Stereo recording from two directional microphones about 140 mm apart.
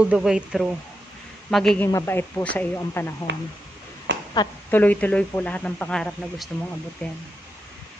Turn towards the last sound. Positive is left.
turn(degrees=10)  # may be behind; listen again after turning